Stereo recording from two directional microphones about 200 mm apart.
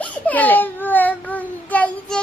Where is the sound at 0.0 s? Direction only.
10° left (ahead or behind).